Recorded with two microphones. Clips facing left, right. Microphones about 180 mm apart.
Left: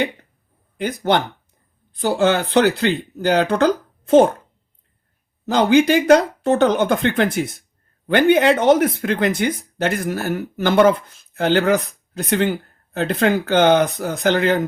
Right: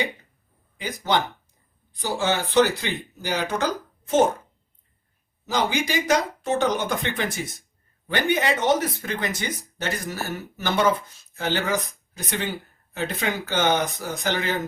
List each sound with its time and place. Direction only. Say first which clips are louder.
1.1 s speech: left 4 dB; 60° left (ahead or behind)
5.5 s speech: left 10 dB; 60° left (ahead or behind)